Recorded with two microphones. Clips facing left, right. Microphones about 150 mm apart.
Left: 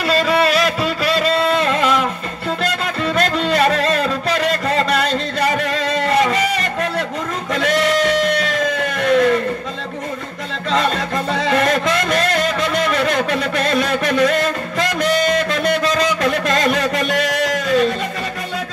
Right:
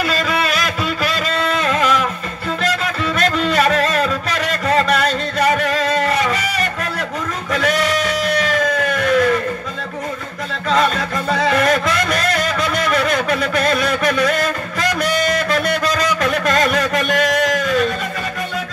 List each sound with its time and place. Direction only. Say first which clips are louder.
0.0 s a sound: left 4 dB; 30° left (ahead or behind)
3.2 s music: even; 30° left (ahead or behind)
10.7 s music: right 1 dB; 25° left (ahead or behind)